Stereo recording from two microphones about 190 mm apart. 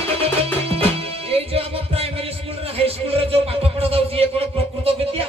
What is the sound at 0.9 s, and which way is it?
Music, 30° right (ahead or behind).